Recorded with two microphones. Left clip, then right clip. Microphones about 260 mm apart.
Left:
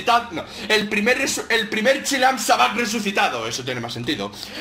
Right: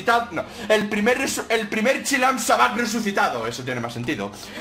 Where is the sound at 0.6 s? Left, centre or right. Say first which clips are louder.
Left 1 dB; centre.